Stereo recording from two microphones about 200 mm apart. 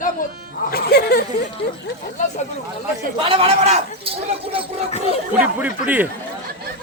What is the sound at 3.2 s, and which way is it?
A man's voice, 30° right (ahead or behind).